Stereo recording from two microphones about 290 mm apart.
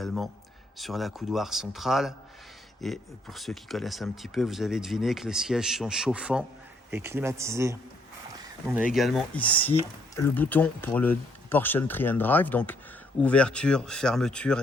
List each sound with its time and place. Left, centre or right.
0.0 s a man's voice: centre